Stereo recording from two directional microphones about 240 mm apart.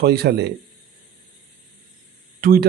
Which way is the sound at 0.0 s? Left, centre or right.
Right.